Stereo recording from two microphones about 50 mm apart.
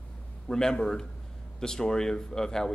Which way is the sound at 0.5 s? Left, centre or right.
Centre.